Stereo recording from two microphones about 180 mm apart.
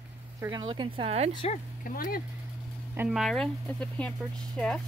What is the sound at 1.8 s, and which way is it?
Speech, 50° left (ahead or behind).